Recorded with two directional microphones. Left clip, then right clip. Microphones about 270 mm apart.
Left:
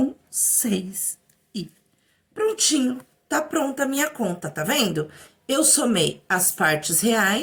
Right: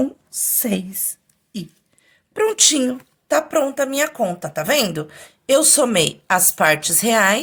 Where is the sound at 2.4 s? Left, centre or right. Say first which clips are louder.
Right 5 dB; right.